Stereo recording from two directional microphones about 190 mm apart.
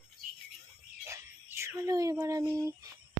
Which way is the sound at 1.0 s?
15° right (ahead or behind).